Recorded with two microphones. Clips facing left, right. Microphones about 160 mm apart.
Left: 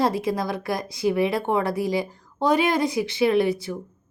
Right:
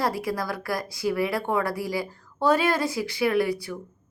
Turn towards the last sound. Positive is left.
turn(degrees=25)  # may be behind; listen again after turning